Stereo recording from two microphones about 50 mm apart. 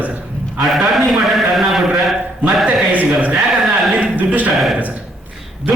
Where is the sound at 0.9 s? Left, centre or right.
Centre.